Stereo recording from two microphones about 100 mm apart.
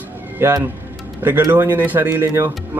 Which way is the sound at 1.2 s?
20° right (ahead or behind).